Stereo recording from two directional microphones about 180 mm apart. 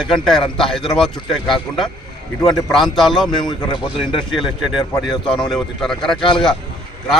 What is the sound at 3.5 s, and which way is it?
Speech, 25° left (ahead or behind).